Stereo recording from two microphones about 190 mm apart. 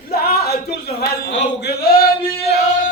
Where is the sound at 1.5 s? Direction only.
60° left (ahead or behind).